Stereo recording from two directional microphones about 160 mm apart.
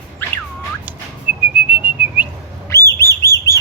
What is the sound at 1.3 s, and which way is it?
Whistling, 10° right (ahead or behind).